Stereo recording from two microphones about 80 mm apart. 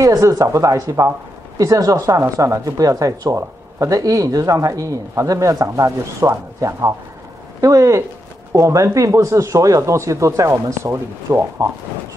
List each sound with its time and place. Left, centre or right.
0.0 s speech: right